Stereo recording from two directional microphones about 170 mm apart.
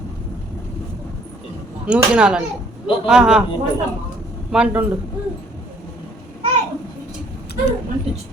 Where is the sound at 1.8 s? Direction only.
5° right (ahead or behind).